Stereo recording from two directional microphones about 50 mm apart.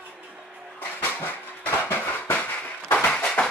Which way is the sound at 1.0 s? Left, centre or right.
Left.